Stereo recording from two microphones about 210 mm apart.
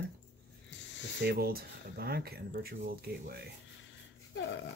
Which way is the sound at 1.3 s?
50° right (ahead or behind).